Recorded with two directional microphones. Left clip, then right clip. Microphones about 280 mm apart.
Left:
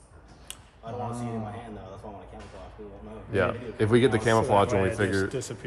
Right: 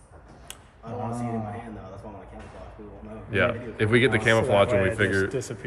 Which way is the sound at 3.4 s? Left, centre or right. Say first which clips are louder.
Right 2 dB; centre.